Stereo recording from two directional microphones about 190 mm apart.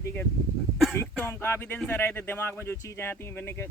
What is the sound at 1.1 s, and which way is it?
Speech, 10° left (ahead or behind).